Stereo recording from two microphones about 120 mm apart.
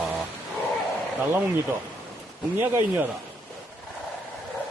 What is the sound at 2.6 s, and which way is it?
Speech, 15° right (ahead or behind).